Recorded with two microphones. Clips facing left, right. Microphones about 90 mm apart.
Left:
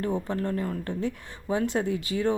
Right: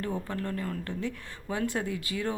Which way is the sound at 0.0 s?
25° left (ahead or behind).